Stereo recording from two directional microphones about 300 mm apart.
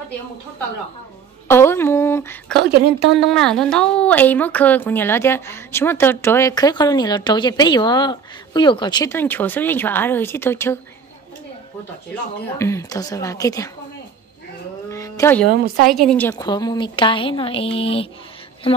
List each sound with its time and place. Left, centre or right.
1.5 s speech: centre
2.6 s a woman's voice: right
3.2 s a woman's voice: centre
12.5 s a woman's voice: centre
14.9 s a sound: centre
15.5 s a woman's voice: right
15.9 s a woman's voice: centre